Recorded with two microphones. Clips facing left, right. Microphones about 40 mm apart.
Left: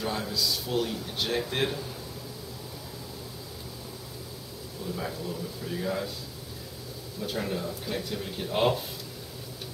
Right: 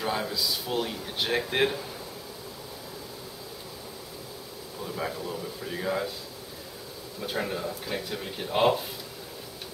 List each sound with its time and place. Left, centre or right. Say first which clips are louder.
0.0 s speech: right 1 dB; centre
4.8 s speech: right 1 dB; centre
7.2 s speech: right 1 dB; centre